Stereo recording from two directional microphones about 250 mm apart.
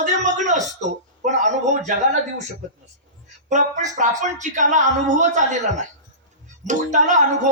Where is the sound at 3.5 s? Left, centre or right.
Right.